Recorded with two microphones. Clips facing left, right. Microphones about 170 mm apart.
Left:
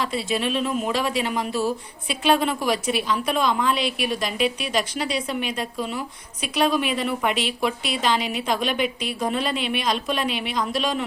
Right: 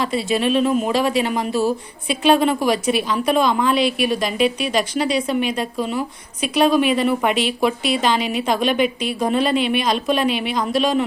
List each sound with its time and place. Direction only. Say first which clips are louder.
0.0 s a woman's voice: right 5 dB; centre (ahead or behind)
0.6 s speech: right 6 dB; 40° right (ahead or behind)
0.9 s a woman's voice: right 5 dB; centre (ahead or behind)